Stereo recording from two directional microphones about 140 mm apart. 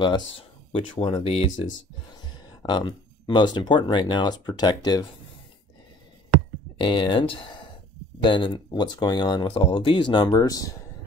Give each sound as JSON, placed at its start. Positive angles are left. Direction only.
{"t": 0.7, "sound": "speech", "side_deg": 40}
{"t": 2.2, "sound": "speech", "side_deg": 30}
{"t": 6.8, "sound": "speech", "side_deg": 35}